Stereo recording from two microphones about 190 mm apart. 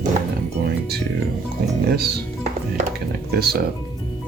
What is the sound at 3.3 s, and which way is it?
Speech, 55° right (ahead or behind).